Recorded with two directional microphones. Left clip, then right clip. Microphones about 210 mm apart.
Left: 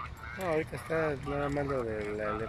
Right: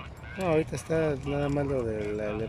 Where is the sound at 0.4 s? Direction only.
10° right (ahead or behind).